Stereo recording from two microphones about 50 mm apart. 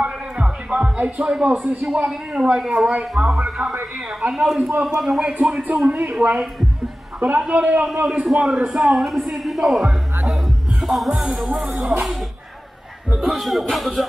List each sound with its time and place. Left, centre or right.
0.0 s music: centre
0.9 s speech: right
1.2 s a man's voice: centre
4.8 s speech: centre
5.2 s a man's voice: right; by 9.8 s centre
9.8 s music: centre
11.9 s speech: centre
13.1 s speech: centre